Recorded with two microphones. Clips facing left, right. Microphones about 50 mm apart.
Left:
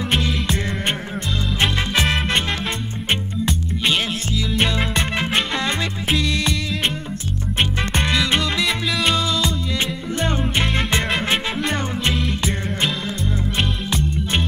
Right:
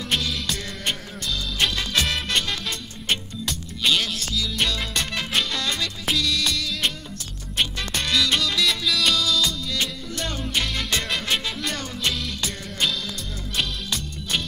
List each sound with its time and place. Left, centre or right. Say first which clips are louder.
0.1 s music: left 3 dB; left